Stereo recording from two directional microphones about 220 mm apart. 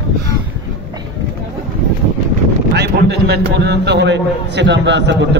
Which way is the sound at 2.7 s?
50° right (ahead or behind).